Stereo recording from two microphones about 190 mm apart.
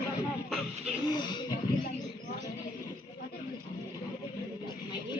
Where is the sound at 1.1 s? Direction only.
25° left (ahead or behind).